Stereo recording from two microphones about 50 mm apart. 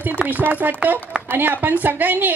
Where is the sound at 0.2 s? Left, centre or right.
Right.